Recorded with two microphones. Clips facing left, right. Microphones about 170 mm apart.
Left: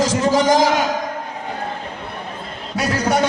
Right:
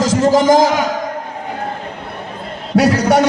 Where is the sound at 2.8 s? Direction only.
70° right (ahead or behind).